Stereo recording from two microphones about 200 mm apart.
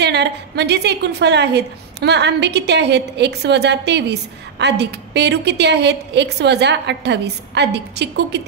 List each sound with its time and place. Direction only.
0.0 s a woman's voice: 55° right (ahead or behind)